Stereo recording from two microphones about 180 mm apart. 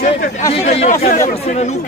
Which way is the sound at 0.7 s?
35° left (ahead or behind).